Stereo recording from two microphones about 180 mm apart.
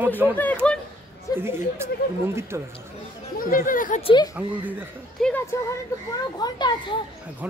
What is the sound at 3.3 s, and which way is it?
Speech, 50° left (ahead or behind).